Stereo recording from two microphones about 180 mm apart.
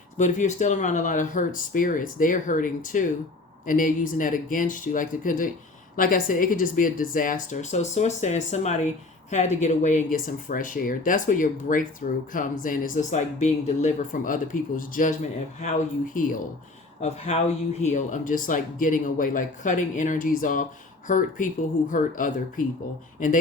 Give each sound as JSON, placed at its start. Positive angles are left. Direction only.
{"t": 0.2, "sound": "speech", "side_deg": 40}
{"t": 17.0, "sound": "speech", "side_deg": 35}